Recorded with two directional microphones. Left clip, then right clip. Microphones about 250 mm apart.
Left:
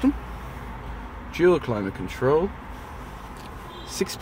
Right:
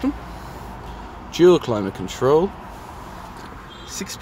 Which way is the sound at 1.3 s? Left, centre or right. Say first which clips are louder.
Right 6 dB; right.